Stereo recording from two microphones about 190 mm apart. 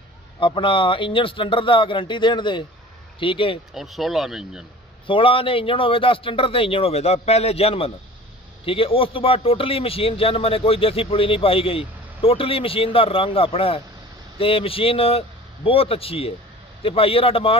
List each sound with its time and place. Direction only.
0.4 s speech: 25° left (ahead or behind)
3.7 s speech: centre (ahead or behind)
5.0 s speech: 30° left (ahead or behind)